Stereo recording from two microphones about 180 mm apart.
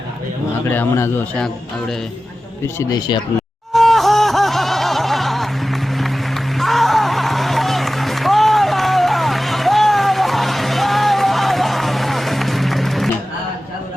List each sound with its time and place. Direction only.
0.6 s a man's voice: 15° left (ahead or behind)
2.7 s speech: 25° left (ahead or behind)
3.7 s music: centre (ahead or behind)